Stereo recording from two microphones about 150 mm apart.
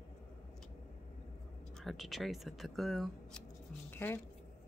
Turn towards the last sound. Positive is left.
turn(degrees=15)  # may be behind; listen again after turning